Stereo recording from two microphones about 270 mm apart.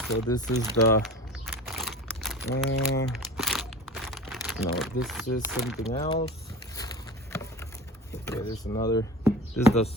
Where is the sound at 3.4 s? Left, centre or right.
Centre.